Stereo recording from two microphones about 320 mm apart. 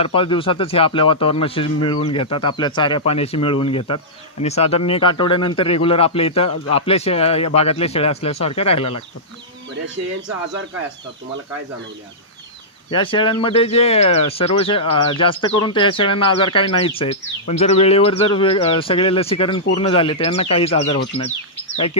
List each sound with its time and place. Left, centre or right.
0.0 s speech: centre
12.9 s speech: centre